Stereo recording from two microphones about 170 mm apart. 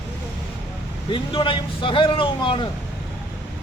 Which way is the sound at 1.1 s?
30° left (ahead or behind).